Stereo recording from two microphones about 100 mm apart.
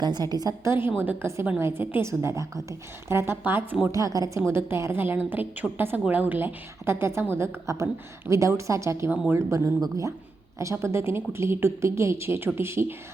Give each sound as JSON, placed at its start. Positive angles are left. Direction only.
{"t": 0.0, "sound": "a woman's voice", "side_deg": -45}
{"t": 0.6, "sound": "a woman's voice", "side_deg": -25}
{"t": 3.9, "sound": "a woman's voice", "side_deg": -35}
{"t": 9.0, "sound": "speech", "side_deg": -10}
{"t": 9.8, "sound": "a woman's voice", "side_deg": -30}